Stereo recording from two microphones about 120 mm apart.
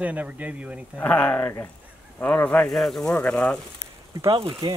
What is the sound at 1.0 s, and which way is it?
Speech, 10° left (ahead or behind).